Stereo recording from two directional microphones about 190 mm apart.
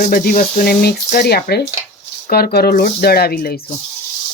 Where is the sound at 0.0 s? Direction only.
50° left (ahead or behind).